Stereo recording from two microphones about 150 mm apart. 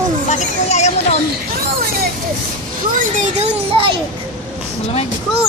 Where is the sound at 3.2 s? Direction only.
40° right (ahead or behind).